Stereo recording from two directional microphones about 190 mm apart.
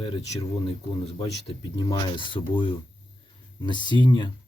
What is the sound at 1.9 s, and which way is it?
Speech, 25° left (ahead or behind).